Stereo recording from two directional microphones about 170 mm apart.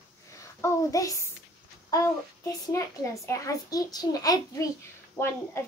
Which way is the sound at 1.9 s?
15° left (ahead or behind).